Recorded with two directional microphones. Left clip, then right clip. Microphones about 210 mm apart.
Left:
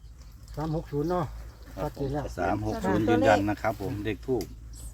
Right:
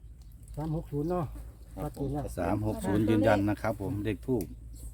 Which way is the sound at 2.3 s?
50° right (ahead or behind).